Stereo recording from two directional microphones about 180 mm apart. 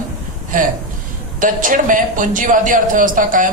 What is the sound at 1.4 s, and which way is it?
A man's voice, 45° right (ahead or behind).